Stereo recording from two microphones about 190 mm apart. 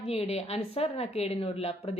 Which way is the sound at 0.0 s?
30° left (ahead or behind).